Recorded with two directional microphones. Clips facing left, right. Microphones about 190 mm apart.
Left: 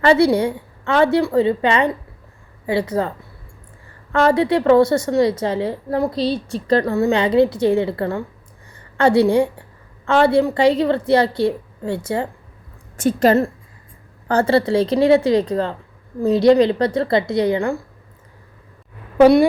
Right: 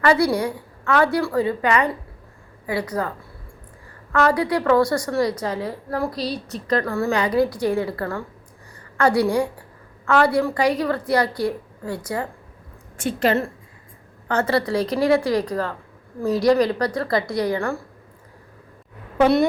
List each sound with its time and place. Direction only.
0.0 s a woman's voice: 25° left (ahead or behind)
4.1 s a woman's voice: 25° left (ahead or behind)
13.0 s a woman's voice: 40° left (ahead or behind)
14.3 s a woman's voice: 30° left (ahead or behind)